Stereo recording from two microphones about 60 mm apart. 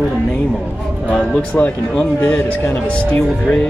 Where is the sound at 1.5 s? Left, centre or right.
Left.